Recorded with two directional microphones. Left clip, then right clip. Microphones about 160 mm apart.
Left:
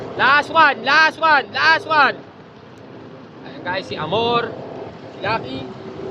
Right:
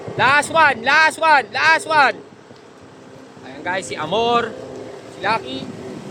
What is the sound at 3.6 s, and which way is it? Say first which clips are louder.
Speech: right 1 dB; 30° right (ahead or behind).